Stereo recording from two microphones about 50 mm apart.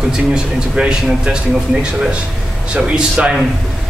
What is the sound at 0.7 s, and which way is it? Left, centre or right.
A man's voice, centre.